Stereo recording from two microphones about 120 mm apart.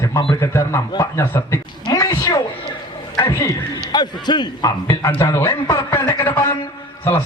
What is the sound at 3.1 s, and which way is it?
Speech, 25° left (ahead or behind).